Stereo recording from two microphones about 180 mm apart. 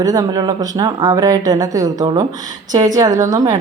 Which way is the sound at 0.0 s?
20° right (ahead or behind).